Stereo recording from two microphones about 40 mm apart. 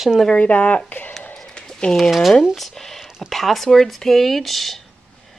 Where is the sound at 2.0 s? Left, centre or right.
Centre.